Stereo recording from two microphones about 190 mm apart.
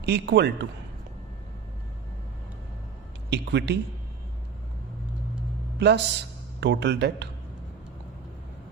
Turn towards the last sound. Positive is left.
turn(degrees=-65)  # may be behind; listen again after turning